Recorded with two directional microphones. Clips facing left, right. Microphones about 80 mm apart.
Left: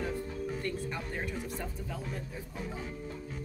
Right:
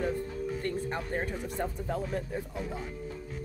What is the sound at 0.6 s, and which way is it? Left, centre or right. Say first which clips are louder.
Speech: right 3 dB; right.